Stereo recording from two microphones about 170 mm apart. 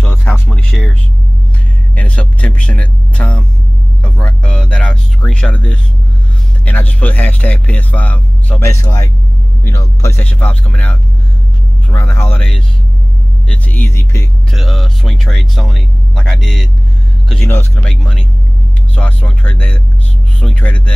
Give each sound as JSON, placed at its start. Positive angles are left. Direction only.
{"t": 0.0, "sound": "music", "side_deg": 10}
{"t": 2.0, "sound": "a sound", "side_deg": 10}
{"t": 4.0, "sound": "music", "side_deg": 5}
{"t": 6.6, "sound": "a man's voice", "side_deg": 10}
{"t": 13.5, "sound": "a man's voice", "side_deg": 10}
{"t": 14.5, "sound": "a man's voice", "side_deg": 0}